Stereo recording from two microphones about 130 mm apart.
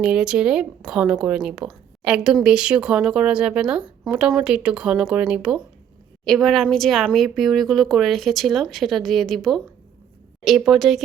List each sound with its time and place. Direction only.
0.0 s a woman's voice: 5° right (ahead or behind)
10.7 s speech: centre (ahead or behind)